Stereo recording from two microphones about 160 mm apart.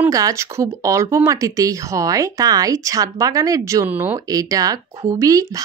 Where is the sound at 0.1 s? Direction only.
20° right (ahead or behind).